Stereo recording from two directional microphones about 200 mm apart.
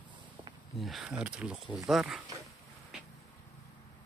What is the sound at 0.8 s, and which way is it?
Speech, centre (ahead or behind).